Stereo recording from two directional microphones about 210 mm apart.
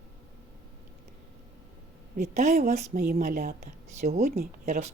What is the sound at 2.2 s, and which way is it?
A woman's voice, 35° right (ahead or behind).